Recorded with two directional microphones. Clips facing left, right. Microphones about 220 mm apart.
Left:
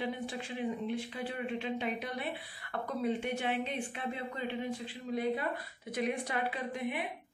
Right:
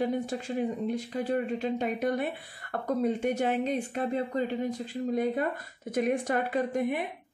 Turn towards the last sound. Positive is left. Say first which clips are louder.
# right 8 dB
turn(degrees=-45)  # may be behind; listen again after turning